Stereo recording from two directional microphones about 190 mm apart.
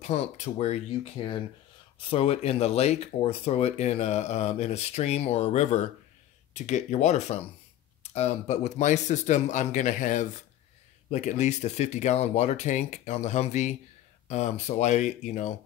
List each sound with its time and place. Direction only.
0.0 s speech: 35° left (ahead or behind)
2.0 s speech: 30° left (ahead or behind)